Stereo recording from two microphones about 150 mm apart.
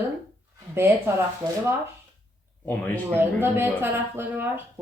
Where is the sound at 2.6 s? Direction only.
10° left (ahead or behind).